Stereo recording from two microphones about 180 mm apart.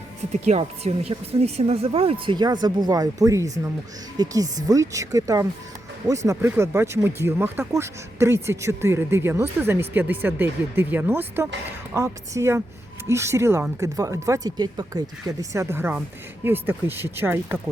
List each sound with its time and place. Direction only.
0.4 s a woman's voice: 35° right (ahead or behind); by 17.6 s 15° right (ahead or behind)